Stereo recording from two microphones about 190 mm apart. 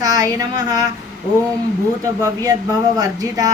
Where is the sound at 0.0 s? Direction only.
20° right (ahead or behind).